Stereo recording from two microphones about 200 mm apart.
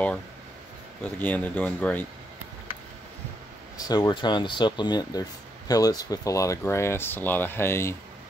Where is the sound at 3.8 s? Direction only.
20° left (ahead or behind).